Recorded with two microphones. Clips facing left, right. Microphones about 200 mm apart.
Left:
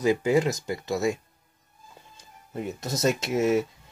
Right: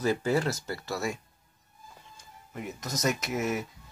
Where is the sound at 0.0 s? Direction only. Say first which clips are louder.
Left 5 dB; 15° left (ahead or behind).